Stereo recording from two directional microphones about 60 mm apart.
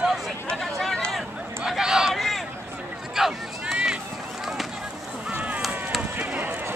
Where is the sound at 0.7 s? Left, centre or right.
Centre.